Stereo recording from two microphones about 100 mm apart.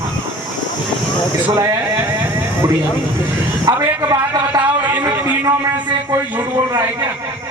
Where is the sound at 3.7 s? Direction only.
40° right (ahead or behind).